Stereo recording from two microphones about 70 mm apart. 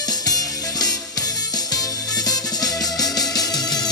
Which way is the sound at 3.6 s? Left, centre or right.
Left.